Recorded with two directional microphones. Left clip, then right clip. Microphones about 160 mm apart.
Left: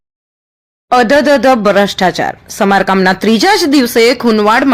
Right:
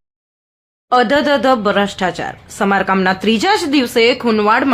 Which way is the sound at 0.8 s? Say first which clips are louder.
Left 4 dB; 35° left (ahead or behind).